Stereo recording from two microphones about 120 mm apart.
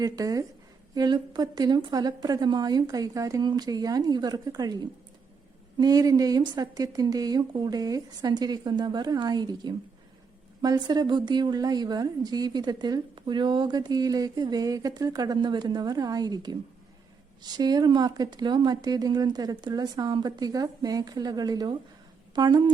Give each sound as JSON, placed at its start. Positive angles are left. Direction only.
{"t": 0.0, "sound": "a woman's voice", "side_deg": -30}